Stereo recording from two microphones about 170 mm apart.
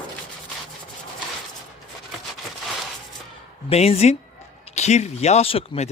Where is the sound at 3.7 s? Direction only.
35° left (ahead or behind).